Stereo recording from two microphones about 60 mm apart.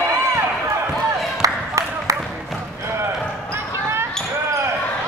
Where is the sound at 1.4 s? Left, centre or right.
Right.